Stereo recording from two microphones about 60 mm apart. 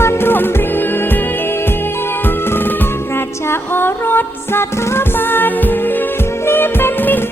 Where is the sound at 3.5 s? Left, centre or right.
Left.